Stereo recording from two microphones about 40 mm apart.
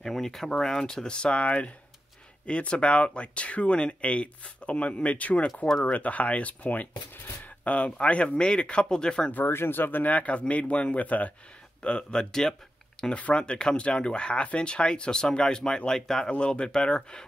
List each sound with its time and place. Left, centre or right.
0.0 s speech: centre
1.1 s speech: left
7.7 s speech: left
9.5 s speech: left
11.8 s speech: left
16.3 s speech: left